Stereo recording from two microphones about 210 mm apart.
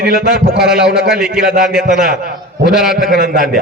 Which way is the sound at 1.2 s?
45° right (ahead or behind).